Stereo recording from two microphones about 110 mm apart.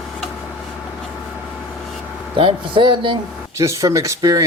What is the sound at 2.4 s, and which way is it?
Speech, 50° right (ahead or behind).